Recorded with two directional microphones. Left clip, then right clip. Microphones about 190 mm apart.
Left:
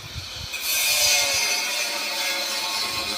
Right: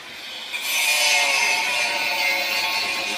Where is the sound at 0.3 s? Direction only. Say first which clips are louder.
Right 2 dB; centre (ahead or behind).